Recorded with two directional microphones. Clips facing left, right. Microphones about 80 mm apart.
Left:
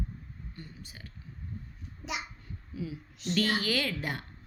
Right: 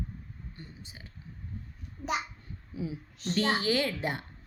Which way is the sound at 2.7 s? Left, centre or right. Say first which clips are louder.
Right 2 dB; right.